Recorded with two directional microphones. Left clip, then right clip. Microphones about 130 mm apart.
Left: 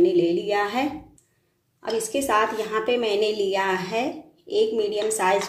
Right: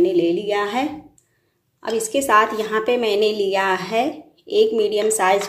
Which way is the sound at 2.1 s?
25° right (ahead or behind).